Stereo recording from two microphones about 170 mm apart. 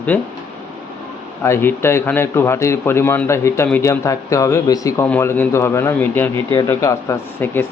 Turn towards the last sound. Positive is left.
turn(degrees=10)  # may be behind; listen again after turning